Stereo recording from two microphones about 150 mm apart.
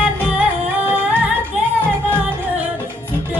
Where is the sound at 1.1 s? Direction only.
10° right (ahead or behind).